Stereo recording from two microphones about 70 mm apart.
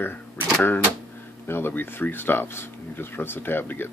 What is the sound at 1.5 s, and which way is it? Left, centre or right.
Speech, left.